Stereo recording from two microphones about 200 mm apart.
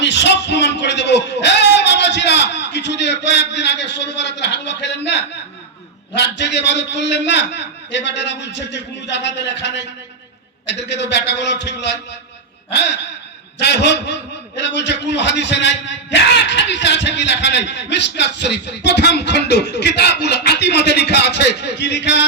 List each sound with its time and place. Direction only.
0.0 s a sound: 60° left (ahead or behind)
6.1 s a man's voice: 60° left (ahead or behind)
13.6 s a man's voice: 60° left (ahead or behind)